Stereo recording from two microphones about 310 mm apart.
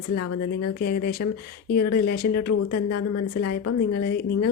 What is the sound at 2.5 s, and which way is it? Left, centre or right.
Speech, left.